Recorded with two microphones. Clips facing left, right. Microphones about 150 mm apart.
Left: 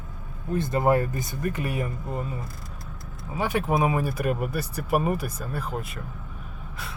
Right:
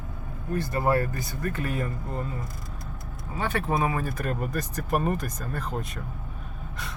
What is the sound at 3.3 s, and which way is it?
Speech, 15° left (ahead or behind).